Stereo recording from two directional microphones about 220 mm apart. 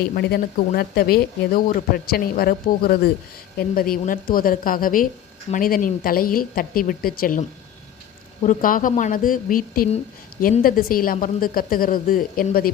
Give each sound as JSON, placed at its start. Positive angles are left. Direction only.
{"t": 0.2, "sound": "a woman's voice", "side_deg": 45}
{"t": 8.4, "sound": "a woman's voice", "side_deg": 40}